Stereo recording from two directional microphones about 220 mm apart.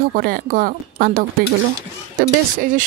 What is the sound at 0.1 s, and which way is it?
A woman's voice, 40° right (ahead or behind).